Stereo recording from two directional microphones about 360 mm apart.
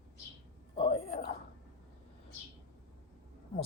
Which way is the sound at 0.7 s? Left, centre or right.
Centre.